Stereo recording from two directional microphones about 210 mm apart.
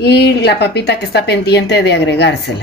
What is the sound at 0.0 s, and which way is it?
Speech, 50° left (ahead or behind).